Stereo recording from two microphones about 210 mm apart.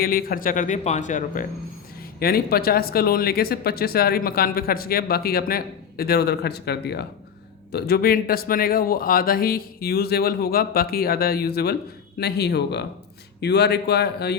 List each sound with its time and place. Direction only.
0.0 s speech: 45° left (ahead or behind)
2.1 s speech: 45° left (ahead or behind)